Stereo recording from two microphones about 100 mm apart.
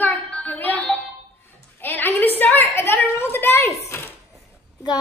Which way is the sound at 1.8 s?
20° left (ahead or behind).